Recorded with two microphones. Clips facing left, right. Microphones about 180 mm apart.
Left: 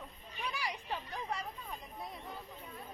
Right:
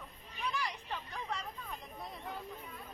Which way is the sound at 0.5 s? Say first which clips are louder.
Left 2 dB; 10° left (ahead or behind).